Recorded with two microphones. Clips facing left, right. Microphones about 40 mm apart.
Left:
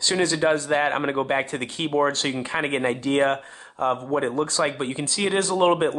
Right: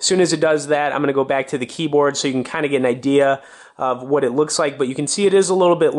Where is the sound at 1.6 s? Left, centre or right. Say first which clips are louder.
Right 6 dB; right.